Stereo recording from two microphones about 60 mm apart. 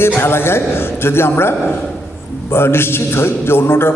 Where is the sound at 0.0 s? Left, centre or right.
Left.